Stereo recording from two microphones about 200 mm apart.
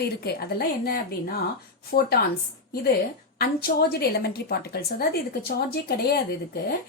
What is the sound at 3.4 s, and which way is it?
A woman's voice, 50° left (ahead or behind).